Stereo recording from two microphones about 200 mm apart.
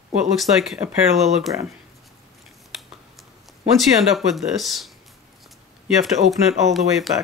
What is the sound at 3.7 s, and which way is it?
Speech, centre (ahead or behind).